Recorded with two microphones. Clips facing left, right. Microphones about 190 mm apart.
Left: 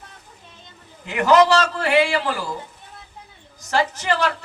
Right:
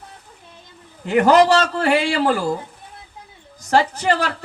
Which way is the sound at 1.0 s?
55° right (ahead or behind).